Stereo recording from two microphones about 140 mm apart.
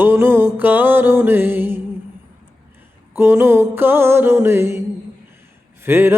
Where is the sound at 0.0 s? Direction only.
15° right (ahead or behind).